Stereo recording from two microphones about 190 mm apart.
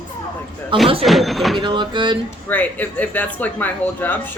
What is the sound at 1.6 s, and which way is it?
Speech, 25° right (ahead or behind).